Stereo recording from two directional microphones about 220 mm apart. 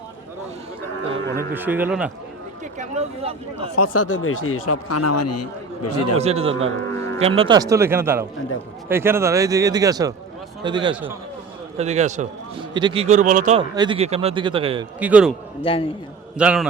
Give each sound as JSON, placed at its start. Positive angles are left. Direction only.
{"t": 1.4, "sound": "a man's voice", "side_deg": -10}
{"t": 2.7, "sound": "speech", "side_deg": -30}
{"t": 3.9, "sound": "speech", "side_deg": 70}
{"t": 6.1, "sound": "a man's voice", "side_deg": -30}
{"t": 6.9, "sound": "music", "side_deg": 10}
{"t": 7.2, "sound": "a man's voice", "side_deg": -25}
{"t": 12.7, "sound": "speech", "side_deg": -20}
{"t": 13.6, "sound": "a man's voice", "side_deg": -20}
{"t": 14.9, "sound": "a man's voice", "side_deg": -5}
{"t": 15.6, "sound": "a man's voice", "side_deg": 25}
{"t": 16.4, "sound": "a man's voice", "side_deg": -5}